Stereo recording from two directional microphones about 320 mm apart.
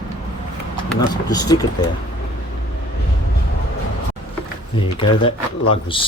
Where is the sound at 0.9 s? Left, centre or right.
Centre.